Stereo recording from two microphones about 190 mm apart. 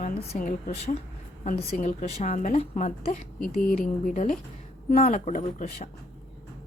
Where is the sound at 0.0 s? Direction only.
45° left (ahead or behind).